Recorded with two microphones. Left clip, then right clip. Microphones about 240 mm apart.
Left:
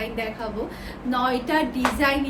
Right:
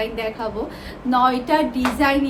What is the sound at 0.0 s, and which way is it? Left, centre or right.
A woman's voice, centre.